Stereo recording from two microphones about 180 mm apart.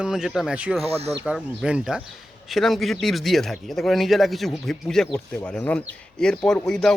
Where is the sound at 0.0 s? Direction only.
5° right (ahead or behind).